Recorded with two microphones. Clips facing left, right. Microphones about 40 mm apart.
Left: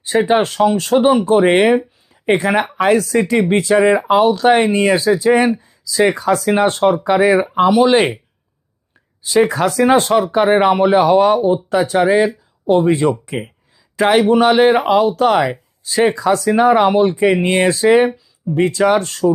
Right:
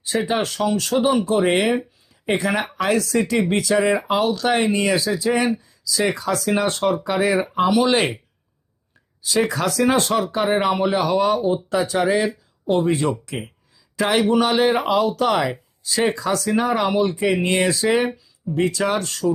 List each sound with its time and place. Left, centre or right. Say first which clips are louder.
0.0 s speech: left 8 dB; left
1.8 s a sound: left 7 dB; centre
2.4 s speech: left 6 dB; left
7.3 s speech: left 4 dB; centre
9.2 s speech: left 6 dB; left
11.3 s speech: left 6 dB; centre
11.7 s speech: left 6 dB; left